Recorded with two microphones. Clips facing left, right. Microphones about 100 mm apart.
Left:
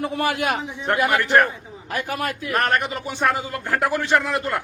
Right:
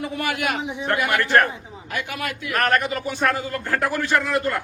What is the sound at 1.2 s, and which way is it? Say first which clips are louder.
Speech: right 1 dB; 15° left (ahead or behind).